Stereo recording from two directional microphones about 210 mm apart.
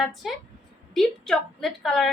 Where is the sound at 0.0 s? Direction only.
Centre (ahead or behind).